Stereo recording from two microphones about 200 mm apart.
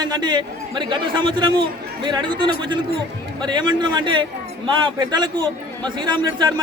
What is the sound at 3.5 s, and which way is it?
A man's voice, 20° right (ahead or behind).